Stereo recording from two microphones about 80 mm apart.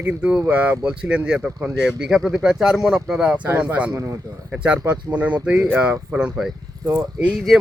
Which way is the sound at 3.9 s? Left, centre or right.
Right.